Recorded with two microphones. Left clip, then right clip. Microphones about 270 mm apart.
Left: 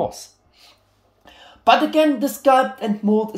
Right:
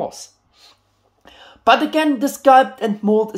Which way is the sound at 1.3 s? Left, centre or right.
Centre.